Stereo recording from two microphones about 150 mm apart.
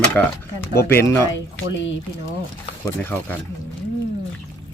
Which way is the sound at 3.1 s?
15° left (ahead or behind).